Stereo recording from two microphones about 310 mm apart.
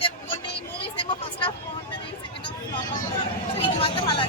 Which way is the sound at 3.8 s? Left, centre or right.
Centre.